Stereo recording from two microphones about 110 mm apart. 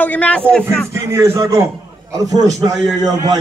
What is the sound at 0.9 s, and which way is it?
Speech, 25° right (ahead or behind).